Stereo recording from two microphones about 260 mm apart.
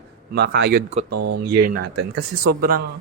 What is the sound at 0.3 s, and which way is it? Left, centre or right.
Speech, right.